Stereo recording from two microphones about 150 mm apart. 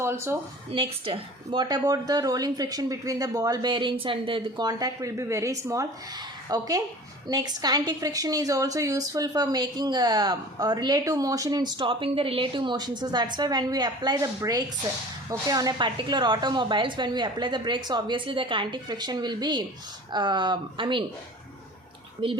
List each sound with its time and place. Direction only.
0.0 s speech: 15° right (ahead or behind)
0.7 s speech: 40° right (ahead or behind)
1.6 s a woman's voice: 25° right (ahead or behind)
22.2 s speech: 35° right (ahead or behind)